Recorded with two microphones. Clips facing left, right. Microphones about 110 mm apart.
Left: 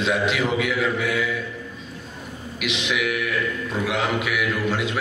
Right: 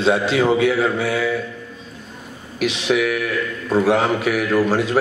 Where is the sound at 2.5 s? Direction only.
35° right (ahead or behind).